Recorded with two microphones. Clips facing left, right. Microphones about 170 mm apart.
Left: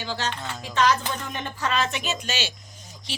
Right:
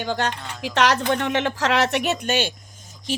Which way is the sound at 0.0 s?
55° right (ahead or behind).